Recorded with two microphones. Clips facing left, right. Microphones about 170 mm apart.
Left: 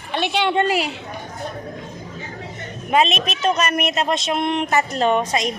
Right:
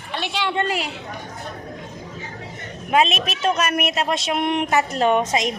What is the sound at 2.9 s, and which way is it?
Speech, 5° right (ahead or behind).